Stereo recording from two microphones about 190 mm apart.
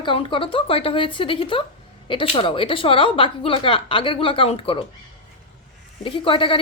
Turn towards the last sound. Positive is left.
turn(degrees=25)  # may be behind; listen again after turning